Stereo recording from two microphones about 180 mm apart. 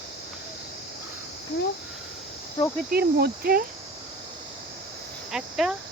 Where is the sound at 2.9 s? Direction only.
60° right (ahead or behind).